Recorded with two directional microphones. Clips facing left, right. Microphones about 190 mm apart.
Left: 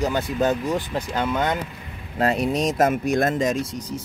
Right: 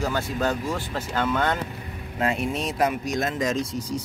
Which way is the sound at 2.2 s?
40° left (ahead or behind).